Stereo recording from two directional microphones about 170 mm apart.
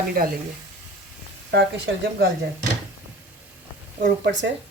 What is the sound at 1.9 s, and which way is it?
Speech, 90° right.